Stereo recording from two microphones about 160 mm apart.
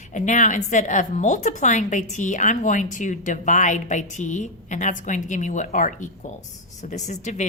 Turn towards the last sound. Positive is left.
turn(degrees=50)  # may be behind; listen again after turning